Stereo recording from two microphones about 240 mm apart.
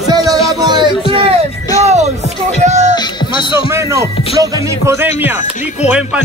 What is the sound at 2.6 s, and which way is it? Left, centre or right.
Music, right.